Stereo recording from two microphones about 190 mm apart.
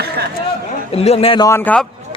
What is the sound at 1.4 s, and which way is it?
Speech, 10° left (ahead or behind).